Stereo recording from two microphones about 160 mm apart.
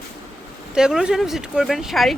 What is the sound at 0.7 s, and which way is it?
Speech, 5° right (ahead or behind).